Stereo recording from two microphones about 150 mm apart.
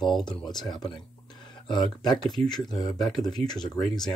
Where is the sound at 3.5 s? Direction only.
5° left (ahead or behind).